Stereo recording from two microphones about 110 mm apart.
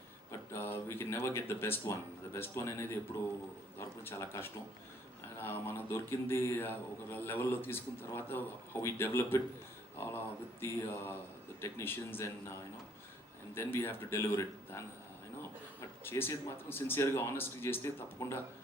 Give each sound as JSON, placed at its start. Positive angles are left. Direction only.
{"t": 0.3, "sound": "speech", "side_deg": 20}
{"t": 13.5, "sound": "speech", "side_deg": 20}
{"t": 16.0, "sound": "speech", "side_deg": 20}